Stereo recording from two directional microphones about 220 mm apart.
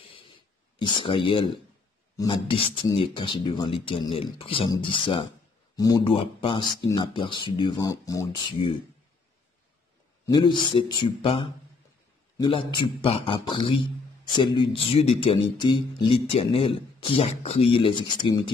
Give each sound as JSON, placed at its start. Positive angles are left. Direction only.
{"t": 0.0, "sound": "a sound", "side_deg": 25}
{"t": 2.1, "sound": "speech", "side_deg": 20}
{"t": 10.2, "sound": "speech", "side_deg": 20}